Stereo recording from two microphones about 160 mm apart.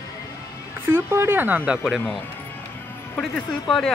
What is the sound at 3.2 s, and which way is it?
Speech, 5° left (ahead or behind).